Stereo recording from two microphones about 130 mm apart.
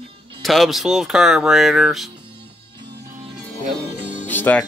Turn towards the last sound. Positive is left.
turn(degrees=15)  # may be behind; listen again after turning